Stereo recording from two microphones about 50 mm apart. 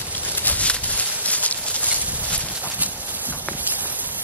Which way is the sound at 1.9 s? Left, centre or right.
Right.